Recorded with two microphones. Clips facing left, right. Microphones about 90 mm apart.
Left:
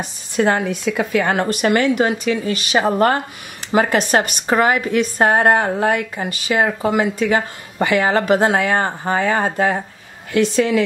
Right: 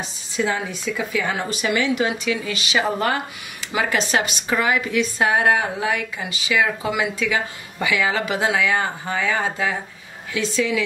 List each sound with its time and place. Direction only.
0.0 s a woman's voice: 55° left (ahead or behind)